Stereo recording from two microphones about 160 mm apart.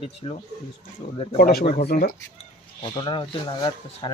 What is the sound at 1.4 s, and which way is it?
Speech, 70° left (ahead or behind).